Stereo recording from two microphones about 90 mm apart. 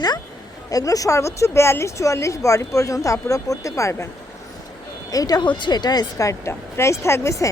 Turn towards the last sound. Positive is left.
turn(degrees=30)  # may be behind; listen again after turning